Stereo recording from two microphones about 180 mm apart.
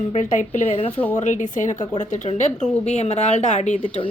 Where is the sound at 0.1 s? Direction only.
45° left (ahead or behind).